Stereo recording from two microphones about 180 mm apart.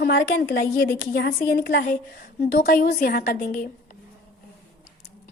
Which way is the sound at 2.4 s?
45° left (ahead or behind).